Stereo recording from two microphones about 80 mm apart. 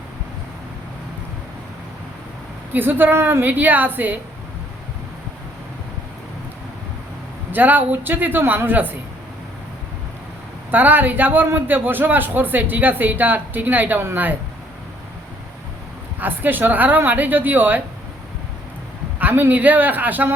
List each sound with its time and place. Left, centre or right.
2.7 s a man's voice: right
7.5 s a man's voice: right
10.7 s a man's voice: right
16.2 s a man's voice: right
19.2 s a man's voice: right